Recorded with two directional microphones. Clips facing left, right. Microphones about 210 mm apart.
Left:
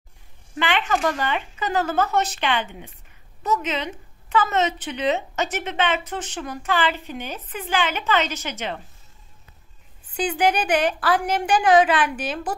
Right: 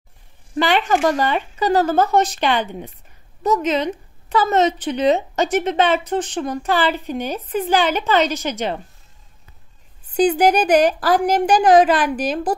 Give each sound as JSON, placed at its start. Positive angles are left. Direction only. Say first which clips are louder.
{"t": 0.6, "sound": "a woman's voice", "louder": "right 6 dB", "side_deg": -40}
{"t": 10.1, "sound": "a woman's voice", "louder": "right 7 dB", "side_deg": -40}